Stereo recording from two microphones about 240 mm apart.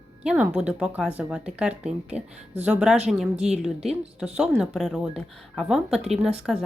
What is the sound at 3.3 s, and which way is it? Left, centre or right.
Speech, right.